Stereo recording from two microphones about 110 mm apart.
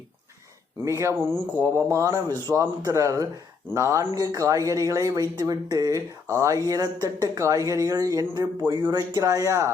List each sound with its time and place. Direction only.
0.9 s speech: 25° right (ahead or behind)